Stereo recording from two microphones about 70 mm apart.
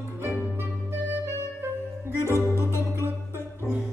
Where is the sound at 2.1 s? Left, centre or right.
Left.